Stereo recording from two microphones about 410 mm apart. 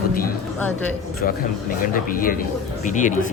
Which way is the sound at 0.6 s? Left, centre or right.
Centre.